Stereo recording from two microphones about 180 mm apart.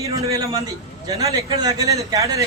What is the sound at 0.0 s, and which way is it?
A man's voice, 20° right (ahead or behind).